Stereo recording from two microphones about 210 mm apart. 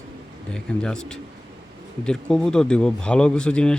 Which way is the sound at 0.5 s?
5° left (ahead or behind).